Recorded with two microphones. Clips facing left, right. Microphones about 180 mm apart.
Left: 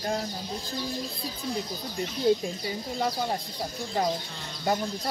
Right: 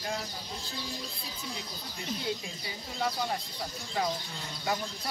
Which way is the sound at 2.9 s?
40° left (ahead or behind).